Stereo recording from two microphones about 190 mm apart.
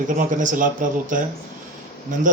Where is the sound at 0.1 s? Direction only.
45° right (ahead or behind).